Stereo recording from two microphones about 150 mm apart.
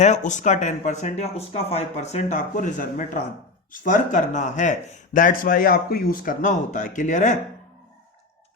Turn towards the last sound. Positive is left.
turn(degrees=55)  # may be behind; listen again after turning